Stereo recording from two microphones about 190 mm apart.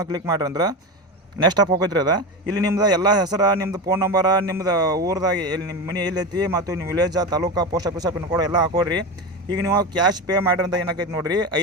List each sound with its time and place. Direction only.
0.0 s speech: 20° right (ahead or behind)